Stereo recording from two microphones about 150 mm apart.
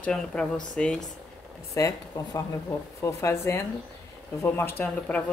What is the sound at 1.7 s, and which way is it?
Speech, 20° left (ahead or behind).